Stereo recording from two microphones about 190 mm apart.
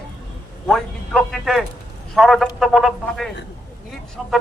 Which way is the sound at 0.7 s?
Centre (ahead or behind).